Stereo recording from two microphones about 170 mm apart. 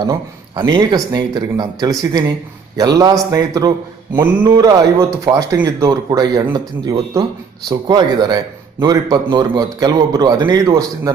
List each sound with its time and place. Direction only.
0.1 s a man's voice: 25° right (ahead or behind)